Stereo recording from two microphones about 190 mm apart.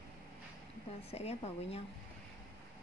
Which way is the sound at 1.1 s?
35° left (ahead or behind).